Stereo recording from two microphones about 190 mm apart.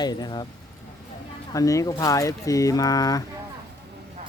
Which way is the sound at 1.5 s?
15° left (ahead or behind).